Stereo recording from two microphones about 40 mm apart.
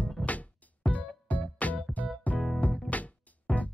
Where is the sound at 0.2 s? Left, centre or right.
Left.